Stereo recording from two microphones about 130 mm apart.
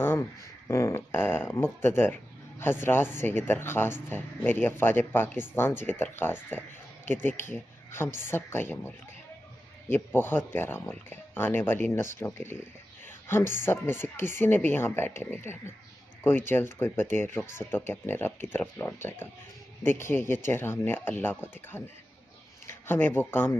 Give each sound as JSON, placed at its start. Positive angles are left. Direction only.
{"t": 0.0, "sound": "speech", "side_deg": 20}
{"t": 13.0, "sound": "a sound", "side_deg": 15}
{"t": 13.6, "sound": "speech", "side_deg": 20}